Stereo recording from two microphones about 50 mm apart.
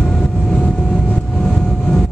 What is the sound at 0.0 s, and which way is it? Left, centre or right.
Vehicle, left.